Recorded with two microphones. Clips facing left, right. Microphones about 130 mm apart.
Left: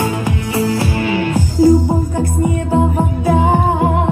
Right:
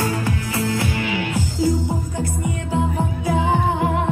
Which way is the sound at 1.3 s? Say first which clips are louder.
Left 12 dB; 50° left (ahead or behind).